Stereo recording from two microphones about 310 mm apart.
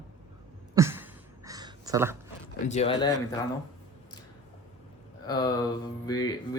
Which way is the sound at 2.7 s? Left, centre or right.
Centre.